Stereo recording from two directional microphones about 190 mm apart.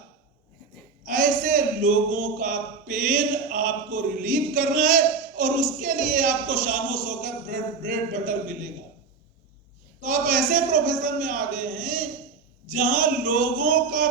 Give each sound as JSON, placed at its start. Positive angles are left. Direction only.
{"t": 1.0, "sound": "a man's voice", "side_deg": -45}
{"t": 10.0, "sound": "a man's voice", "side_deg": -45}